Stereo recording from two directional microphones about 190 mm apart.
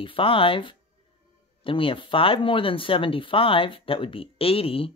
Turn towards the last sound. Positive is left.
turn(degrees=30)  # may be behind; listen again after turning